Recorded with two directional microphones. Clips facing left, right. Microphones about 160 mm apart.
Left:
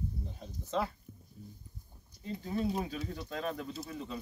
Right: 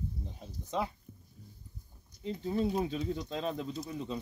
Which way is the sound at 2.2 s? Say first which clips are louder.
Right 2 dB; 25° right (ahead or behind).